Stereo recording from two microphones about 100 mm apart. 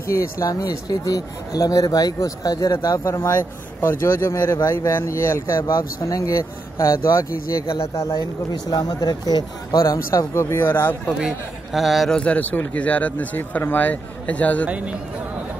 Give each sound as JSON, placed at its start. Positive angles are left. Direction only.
{"t": 0.4, "sound": "speech", "side_deg": 35}
{"t": 11.1, "sound": "a man's voice", "side_deg": -5}
{"t": 12.2, "sound": "speech", "side_deg": 15}